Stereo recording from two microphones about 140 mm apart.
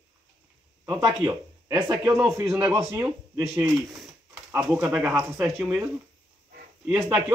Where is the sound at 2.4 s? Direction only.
25° right (ahead or behind).